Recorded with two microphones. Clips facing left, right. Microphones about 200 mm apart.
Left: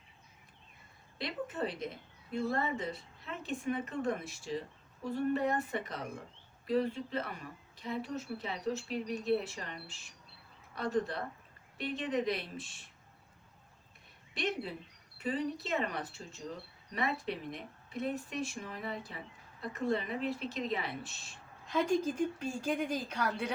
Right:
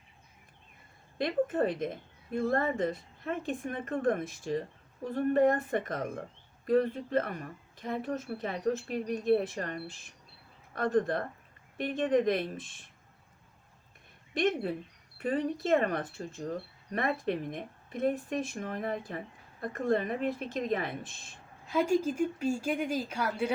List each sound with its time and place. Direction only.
1.2 s speech: 50° right (ahead or behind)
14.3 s speech: 50° right (ahead or behind)
21.7 s a woman's voice: 10° right (ahead or behind)